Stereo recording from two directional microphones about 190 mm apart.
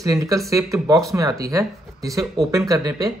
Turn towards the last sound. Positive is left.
turn(degrees=-20)  # may be behind; listen again after turning